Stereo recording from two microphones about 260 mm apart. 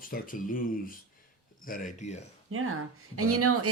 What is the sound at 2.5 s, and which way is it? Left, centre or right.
Speech, right.